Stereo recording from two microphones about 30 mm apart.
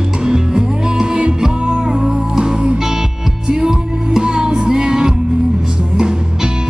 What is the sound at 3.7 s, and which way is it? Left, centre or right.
Music, right.